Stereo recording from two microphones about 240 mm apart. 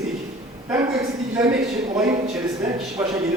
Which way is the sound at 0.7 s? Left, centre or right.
Centre.